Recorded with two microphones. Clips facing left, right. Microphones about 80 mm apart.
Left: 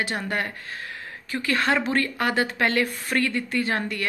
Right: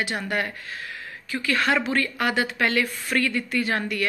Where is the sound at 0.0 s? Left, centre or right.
Left.